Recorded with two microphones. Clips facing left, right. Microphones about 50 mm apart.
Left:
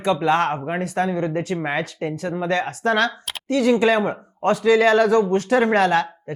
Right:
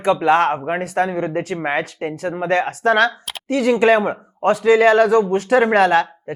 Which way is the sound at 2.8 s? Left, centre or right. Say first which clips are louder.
Right 4 dB; right.